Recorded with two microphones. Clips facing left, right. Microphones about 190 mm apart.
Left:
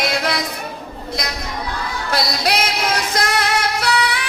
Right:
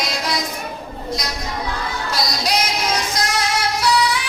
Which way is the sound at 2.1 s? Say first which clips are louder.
Left 3 dB; 60° left (ahead or behind).